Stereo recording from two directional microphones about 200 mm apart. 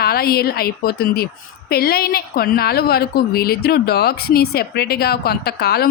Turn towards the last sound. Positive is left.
turn(degrees=55)  # may be behind; listen again after turning